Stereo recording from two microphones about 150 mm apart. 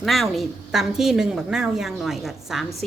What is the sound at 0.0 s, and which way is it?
A woman's voice, centre (ahead or behind).